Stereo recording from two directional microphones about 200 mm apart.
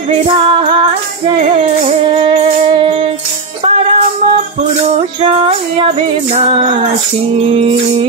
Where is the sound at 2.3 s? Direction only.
25° right (ahead or behind).